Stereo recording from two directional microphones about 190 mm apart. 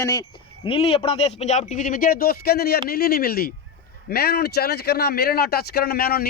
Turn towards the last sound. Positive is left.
turn(degrees=55)  # may be behind; listen again after turning